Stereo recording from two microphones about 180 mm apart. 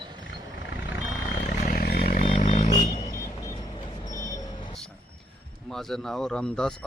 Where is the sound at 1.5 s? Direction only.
55° left (ahead or behind).